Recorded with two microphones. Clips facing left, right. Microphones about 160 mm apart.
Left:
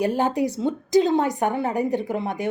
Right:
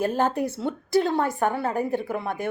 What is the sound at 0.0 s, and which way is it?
Speech, 15° left (ahead or behind).